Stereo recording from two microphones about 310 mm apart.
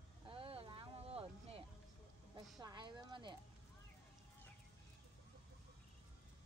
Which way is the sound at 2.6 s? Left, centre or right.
Centre.